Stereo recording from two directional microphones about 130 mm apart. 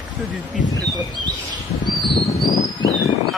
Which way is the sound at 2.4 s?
30° left (ahead or behind).